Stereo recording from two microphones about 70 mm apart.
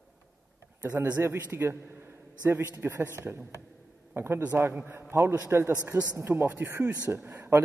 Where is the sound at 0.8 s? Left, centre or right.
Right.